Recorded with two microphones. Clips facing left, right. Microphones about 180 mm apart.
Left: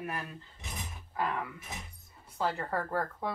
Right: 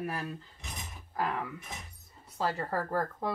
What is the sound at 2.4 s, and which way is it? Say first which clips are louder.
Speech: right 1 dB; 5° right (ahead or behind).